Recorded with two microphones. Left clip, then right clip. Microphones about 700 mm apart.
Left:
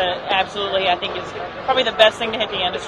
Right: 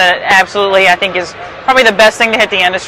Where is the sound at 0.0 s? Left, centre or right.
Right.